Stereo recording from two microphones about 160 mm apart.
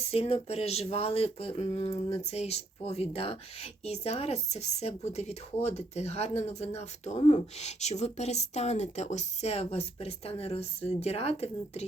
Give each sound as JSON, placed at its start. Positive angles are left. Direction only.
{"t": 0.0, "sound": "speech", "side_deg": 40}